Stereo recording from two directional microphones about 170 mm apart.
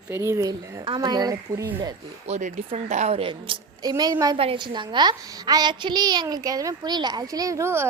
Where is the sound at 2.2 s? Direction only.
45° right (ahead or behind).